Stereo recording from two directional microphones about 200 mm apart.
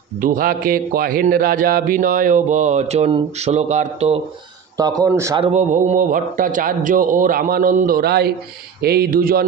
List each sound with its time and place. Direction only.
0.2 s a man's voice: 45° right (ahead or behind)
4.8 s speech: 20° right (ahead or behind)
5.4 s a man's voice: 35° right (ahead or behind); by 9.5 s 50° right (ahead or behind)